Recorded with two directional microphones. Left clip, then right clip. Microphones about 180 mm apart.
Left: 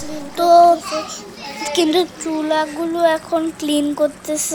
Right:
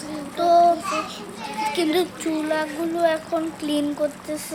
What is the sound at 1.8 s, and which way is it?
Speech, 35° left (ahead or behind).